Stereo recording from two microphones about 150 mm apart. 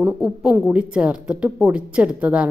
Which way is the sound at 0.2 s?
5° right (ahead or behind).